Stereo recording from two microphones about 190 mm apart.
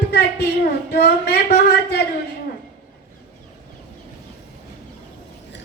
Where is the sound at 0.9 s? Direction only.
55° left (ahead or behind).